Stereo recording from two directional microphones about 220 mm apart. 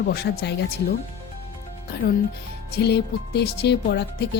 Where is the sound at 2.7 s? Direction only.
50° left (ahead or behind).